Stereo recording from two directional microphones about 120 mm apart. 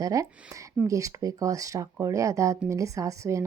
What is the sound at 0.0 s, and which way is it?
Speech, 30° right (ahead or behind).